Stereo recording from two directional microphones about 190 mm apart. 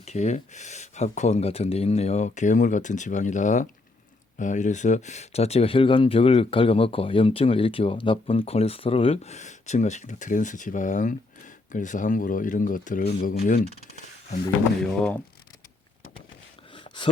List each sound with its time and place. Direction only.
0.0 s speech: 35° left (ahead or behind); by 13.7 s 55° left (ahead or behind)
14.8 s speech: 10° left (ahead or behind)
16.7 s a sound: 25° left (ahead or behind)